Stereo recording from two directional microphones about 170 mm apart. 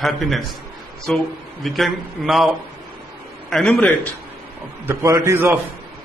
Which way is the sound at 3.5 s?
5° left (ahead or behind).